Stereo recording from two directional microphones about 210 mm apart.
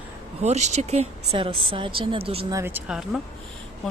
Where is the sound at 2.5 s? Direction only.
10° right (ahead or behind).